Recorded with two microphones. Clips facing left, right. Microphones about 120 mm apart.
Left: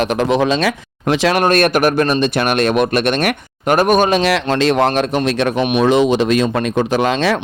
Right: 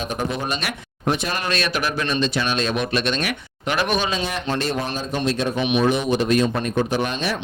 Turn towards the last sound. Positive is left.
turn(degrees=90)